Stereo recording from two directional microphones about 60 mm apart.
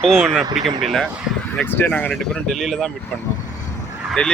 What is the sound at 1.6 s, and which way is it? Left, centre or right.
Speech, left.